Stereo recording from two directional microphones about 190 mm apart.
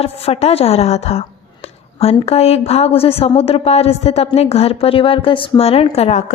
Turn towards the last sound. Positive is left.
turn(degrees=35)  # may be behind; listen again after turning